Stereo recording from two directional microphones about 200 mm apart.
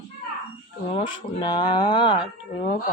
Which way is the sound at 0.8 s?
25° left (ahead or behind).